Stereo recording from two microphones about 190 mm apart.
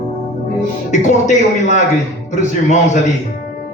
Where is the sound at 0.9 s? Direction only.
40° left (ahead or behind).